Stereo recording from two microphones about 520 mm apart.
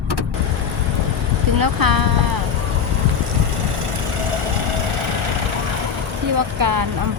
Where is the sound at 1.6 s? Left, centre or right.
Right.